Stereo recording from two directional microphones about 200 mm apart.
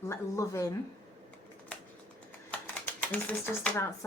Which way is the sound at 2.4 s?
10° left (ahead or behind).